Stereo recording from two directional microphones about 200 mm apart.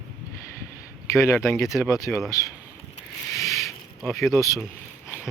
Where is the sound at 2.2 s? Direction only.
15° left (ahead or behind).